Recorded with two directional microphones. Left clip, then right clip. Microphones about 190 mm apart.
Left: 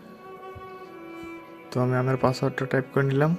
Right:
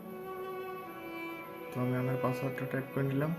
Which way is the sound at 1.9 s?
55° left (ahead or behind).